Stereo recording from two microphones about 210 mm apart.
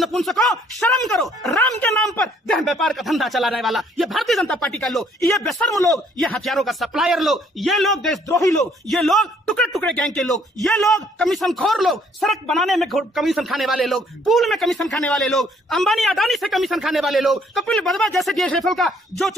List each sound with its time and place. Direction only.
0.0 s speech: centre (ahead or behind)
8.3 s speech: 15° left (ahead or behind)
8.9 s speech: centre (ahead or behind)